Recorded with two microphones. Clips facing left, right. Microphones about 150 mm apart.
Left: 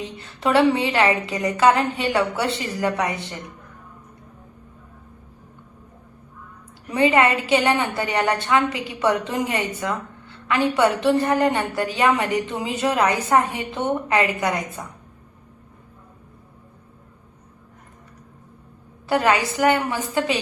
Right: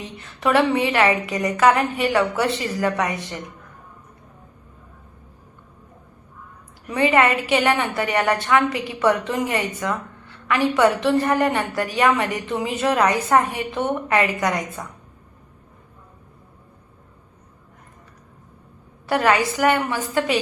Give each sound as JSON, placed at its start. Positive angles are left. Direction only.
{"t": 0.2, "sound": "a woman's voice", "side_deg": 30}
{"t": 6.9, "sound": "a woman's voice", "side_deg": 25}
{"t": 19.0, "sound": "a woman's voice", "side_deg": 25}